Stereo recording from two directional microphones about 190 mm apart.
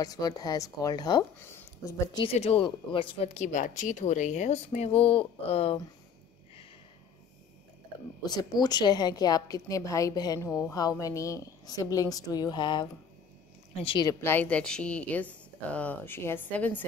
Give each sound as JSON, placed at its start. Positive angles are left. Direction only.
{"t": 0.0, "sound": "a woman's voice", "side_deg": 20}
{"t": 8.3, "sound": "a woman's voice", "side_deg": 20}
{"t": 14.2, "sound": "speech", "side_deg": 10}